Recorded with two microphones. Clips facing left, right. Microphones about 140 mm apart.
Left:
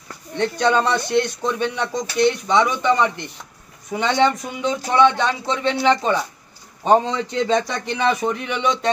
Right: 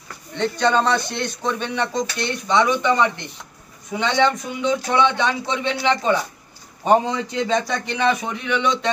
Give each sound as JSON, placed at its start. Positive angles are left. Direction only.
{"t": 0.6, "sound": "speech", "side_deg": 10}
{"t": 8.5, "sound": "a man's voice", "side_deg": 45}